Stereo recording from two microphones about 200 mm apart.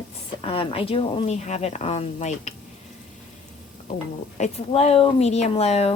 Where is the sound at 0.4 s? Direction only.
25° left (ahead or behind).